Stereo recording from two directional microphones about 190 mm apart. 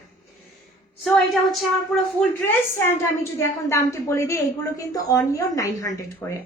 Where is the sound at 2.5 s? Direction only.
15° left (ahead or behind).